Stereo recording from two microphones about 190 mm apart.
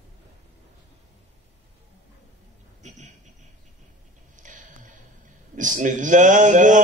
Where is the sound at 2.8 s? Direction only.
40° right (ahead or behind).